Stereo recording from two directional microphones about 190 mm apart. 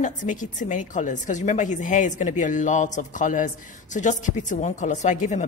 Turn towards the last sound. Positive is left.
turn(degrees=40)  # may be behind; listen again after turning